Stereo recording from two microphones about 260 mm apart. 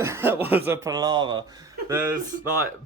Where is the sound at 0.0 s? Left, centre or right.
Centre.